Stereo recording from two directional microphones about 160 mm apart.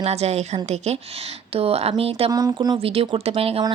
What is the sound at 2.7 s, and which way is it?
Speech, 35° right (ahead or behind).